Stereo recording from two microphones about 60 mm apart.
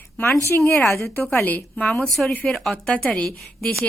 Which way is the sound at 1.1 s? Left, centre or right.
Left.